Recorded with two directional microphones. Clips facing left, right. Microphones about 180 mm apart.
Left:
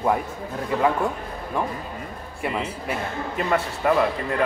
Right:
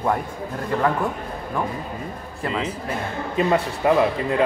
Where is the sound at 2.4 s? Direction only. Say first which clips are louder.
Right 1 dB; 15° left (ahead or behind).